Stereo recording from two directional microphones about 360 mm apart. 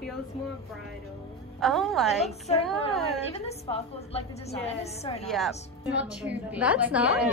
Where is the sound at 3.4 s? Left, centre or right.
Centre.